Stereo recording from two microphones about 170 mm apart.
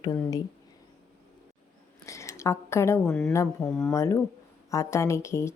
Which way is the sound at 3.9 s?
15° left (ahead or behind).